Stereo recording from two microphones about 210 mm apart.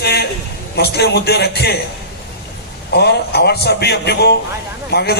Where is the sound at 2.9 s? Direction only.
50° left (ahead or behind).